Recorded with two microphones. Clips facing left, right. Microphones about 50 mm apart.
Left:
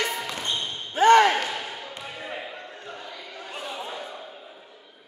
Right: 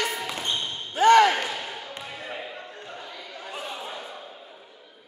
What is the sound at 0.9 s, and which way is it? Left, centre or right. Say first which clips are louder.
Basketball bounce: even; left.